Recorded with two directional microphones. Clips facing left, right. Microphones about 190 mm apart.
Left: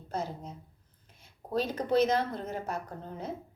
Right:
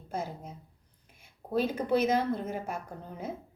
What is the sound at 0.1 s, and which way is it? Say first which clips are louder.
Speech: left 1 dB; 10° right (ahead or behind).